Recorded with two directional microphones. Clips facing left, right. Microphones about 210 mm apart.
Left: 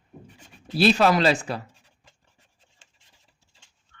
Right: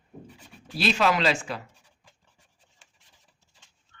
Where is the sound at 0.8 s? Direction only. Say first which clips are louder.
Left 5 dB; 40° left (ahead or behind).